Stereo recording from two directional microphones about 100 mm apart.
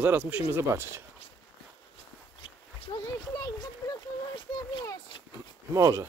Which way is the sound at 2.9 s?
50° left (ahead or behind).